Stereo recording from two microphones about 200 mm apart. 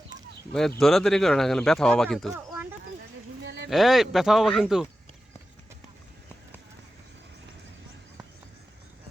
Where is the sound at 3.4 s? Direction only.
55° right (ahead or behind).